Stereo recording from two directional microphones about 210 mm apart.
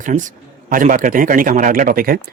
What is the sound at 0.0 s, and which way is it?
A man's voice, 35° right (ahead or behind).